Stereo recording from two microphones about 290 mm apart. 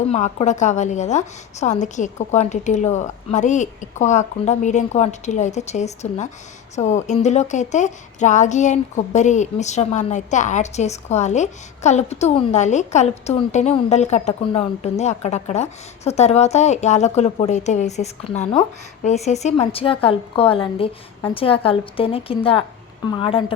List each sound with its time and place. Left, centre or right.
0.1 s a woman's voice: left